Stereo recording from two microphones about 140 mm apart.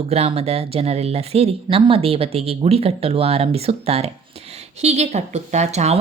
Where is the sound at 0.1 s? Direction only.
45° right (ahead or behind).